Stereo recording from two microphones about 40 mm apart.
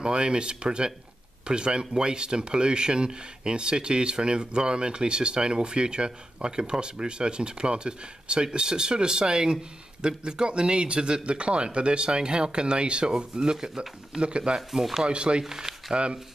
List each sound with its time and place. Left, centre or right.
0.0 s speech: right
14.7 s speech: centre
15.0 s speech: right
15.4 s speech: centre
15.9 s speech: right